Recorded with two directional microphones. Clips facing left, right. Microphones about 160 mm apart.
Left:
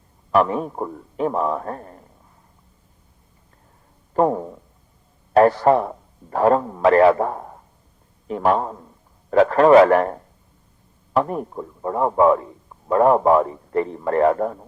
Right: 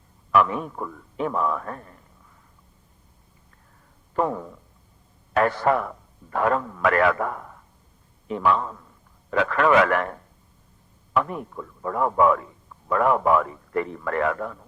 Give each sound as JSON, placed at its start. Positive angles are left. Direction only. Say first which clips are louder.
{"t": 0.3, "sound": "a man's voice", "louder": "left 3 dB", "side_deg": 35}
{"t": 4.1, "sound": "a man's voice", "louder": "left 6 dB", "side_deg": 35}